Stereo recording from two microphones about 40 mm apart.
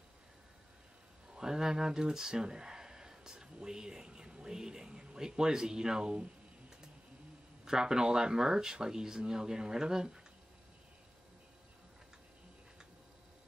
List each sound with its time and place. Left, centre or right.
1.3 s speech: centre
7.6 s speech: centre